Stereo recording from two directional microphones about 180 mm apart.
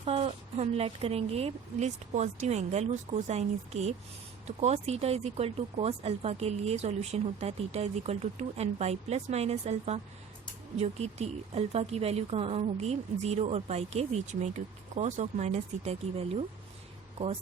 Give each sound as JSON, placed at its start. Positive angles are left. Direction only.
{"t": 0.0, "sound": "speech", "side_deg": -35}